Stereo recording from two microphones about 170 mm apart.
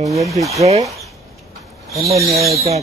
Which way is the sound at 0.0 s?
20° right (ahead or behind).